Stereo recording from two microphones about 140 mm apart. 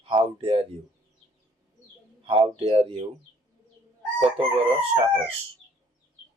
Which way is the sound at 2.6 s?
40° right (ahead or behind).